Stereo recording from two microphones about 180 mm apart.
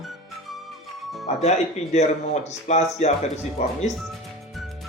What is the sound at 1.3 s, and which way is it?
Speech, 40° left (ahead or behind).